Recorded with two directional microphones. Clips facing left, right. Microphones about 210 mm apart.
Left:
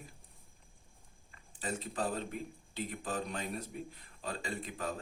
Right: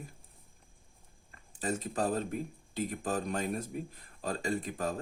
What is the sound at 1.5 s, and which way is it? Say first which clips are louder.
Speech: right 5 dB; 45° right (ahead or behind).